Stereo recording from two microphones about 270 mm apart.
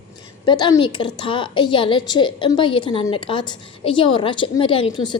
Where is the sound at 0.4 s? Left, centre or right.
Centre.